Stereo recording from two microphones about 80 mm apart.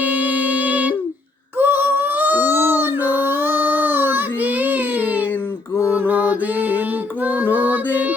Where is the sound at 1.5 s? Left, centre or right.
Right.